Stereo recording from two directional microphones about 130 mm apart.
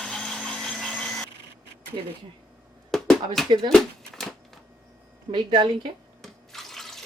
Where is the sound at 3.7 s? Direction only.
Centre (ahead or behind).